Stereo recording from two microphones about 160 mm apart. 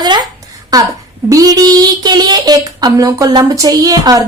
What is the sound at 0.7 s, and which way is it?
Speech, 25° right (ahead or behind).